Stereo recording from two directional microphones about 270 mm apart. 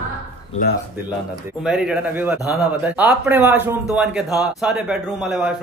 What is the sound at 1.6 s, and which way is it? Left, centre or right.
A man's voice, centre.